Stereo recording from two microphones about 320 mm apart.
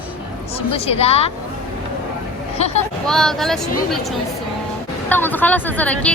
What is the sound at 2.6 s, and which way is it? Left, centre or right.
Speech, centre.